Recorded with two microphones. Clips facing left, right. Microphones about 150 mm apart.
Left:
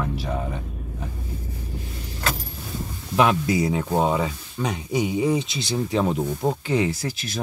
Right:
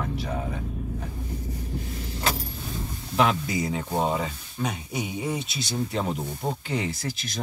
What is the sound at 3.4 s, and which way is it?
Speech, 80° left.